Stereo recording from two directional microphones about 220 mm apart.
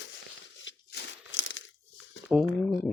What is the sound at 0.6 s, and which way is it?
Crumpling, 60° left (ahead or behind).